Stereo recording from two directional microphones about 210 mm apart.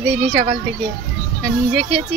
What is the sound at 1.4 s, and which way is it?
Speech, centre (ahead or behind).